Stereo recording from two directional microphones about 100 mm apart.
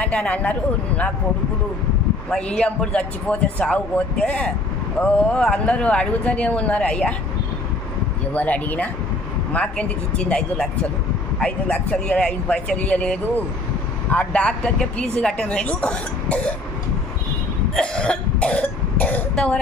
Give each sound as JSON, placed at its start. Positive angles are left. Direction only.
{"t": 0.0, "sound": "a man's voice", "side_deg": 10}
{"t": 2.2, "sound": "a man's voice", "side_deg": 10}
{"t": 8.3, "sound": "a man's voice", "side_deg": 15}
{"t": 17.7, "sound": "speech", "side_deg": 10}